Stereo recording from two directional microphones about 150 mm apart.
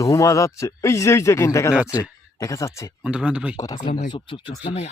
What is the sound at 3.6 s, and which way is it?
Speech, 30° left (ahead or behind).